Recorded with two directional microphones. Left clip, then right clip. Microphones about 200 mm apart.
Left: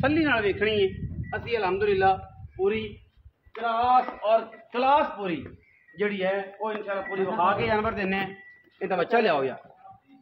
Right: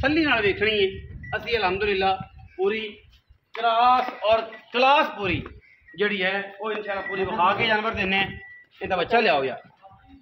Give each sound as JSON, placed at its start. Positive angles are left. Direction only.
{"t": 0.0, "sound": "a man's voice", "side_deg": 35}
{"t": 3.5, "sound": "a man's voice", "side_deg": -25}
{"t": 5.9, "sound": "a man's voice", "side_deg": -15}
{"t": 6.6, "sound": "a man's voice", "side_deg": 10}